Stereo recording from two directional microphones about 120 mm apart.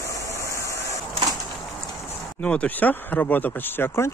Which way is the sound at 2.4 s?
10° left (ahead or behind).